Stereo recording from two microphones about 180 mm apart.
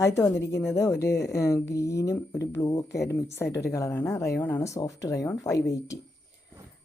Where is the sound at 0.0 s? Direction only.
15° left (ahead or behind).